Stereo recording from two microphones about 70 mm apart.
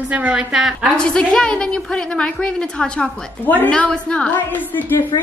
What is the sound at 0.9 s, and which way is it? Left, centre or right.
A woman's voice, centre.